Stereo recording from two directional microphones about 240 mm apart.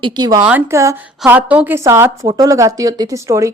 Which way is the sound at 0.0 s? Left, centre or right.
Centre.